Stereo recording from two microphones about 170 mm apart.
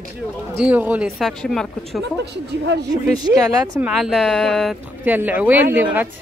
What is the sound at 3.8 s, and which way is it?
A woman's voice, centre (ahead or behind).